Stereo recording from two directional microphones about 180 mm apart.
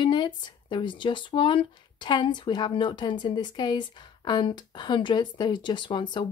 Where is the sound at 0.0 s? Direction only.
25° left (ahead or behind).